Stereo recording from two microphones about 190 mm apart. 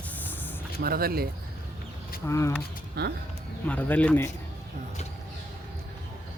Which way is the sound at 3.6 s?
10° left (ahead or behind).